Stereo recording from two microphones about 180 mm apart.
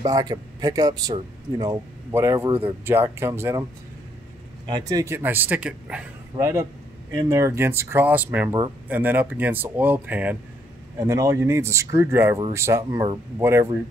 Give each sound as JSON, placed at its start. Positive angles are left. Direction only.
{"t": 0.0, "sound": "speech", "side_deg": -20}
{"t": 4.6, "sound": "speech", "side_deg": -20}
{"t": 6.3, "sound": "speech", "side_deg": -15}